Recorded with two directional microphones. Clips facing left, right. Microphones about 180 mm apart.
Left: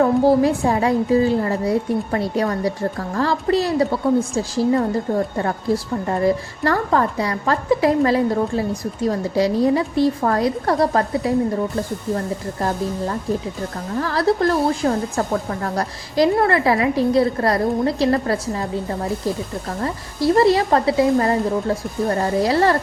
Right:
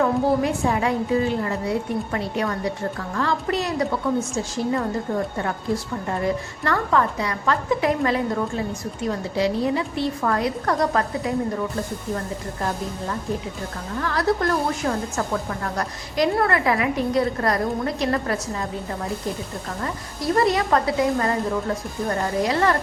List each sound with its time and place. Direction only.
0.0 s a woman's voice: 35° left (ahead or behind)
14.0 s a woman's voice: 30° left (ahead or behind)